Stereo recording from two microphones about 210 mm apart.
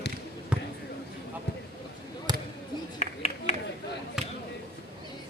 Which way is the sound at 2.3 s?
20° right (ahead or behind).